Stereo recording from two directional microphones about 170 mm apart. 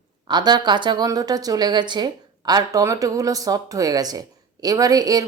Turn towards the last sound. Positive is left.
turn(degrees=-20)  # may be behind; listen again after turning